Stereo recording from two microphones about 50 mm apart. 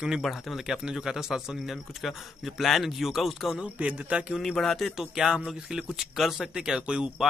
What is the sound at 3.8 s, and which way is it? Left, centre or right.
Speech, right.